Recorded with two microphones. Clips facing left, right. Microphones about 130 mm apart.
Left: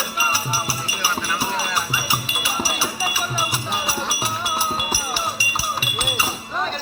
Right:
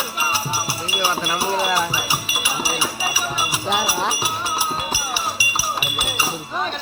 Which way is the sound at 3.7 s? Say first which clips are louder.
Right 4 dB; 90° right.